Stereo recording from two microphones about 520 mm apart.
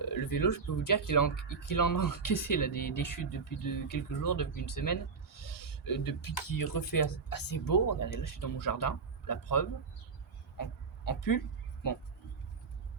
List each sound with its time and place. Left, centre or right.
0.1 s speech: left
10.6 s dog: left